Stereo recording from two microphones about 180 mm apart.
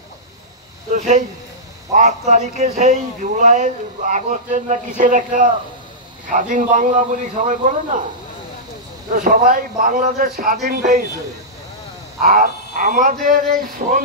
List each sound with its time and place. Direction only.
0.9 s a man's voice: 40° right (ahead or behind)
9.1 s a man's voice: 45° right (ahead or behind)
12.2 s a man's voice: 50° right (ahead or behind)